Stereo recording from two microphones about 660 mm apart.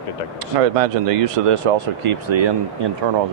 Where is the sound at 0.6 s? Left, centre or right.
Right.